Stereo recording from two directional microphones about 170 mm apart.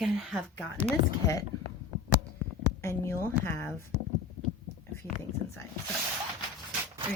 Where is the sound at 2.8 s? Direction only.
15° left (ahead or behind).